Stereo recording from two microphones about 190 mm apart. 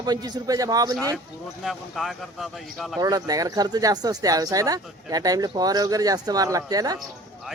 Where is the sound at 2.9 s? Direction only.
20° right (ahead or behind).